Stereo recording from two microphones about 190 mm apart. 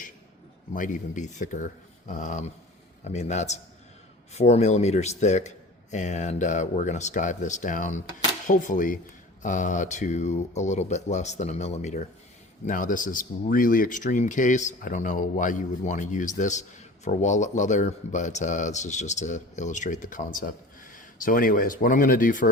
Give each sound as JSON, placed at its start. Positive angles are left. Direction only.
{"t": 0.7, "sound": "speech", "side_deg": 45}